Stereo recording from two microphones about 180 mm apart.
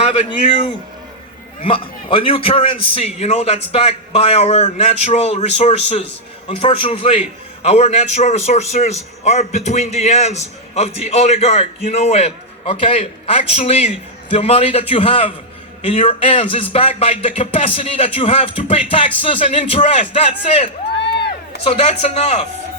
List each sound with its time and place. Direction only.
0.0 s a man's voice: 35° left (ahead or behind)
1.6 s a man's voice: 30° left (ahead or behind)
21.7 s a man's voice: 35° left (ahead or behind)